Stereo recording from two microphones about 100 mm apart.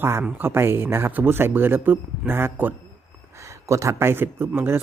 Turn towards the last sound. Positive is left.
turn(degrees=-25)  # may be behind; listen again after turning